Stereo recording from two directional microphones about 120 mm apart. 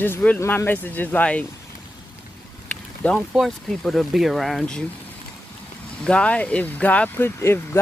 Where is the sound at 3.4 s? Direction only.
Centre (ahead or behind).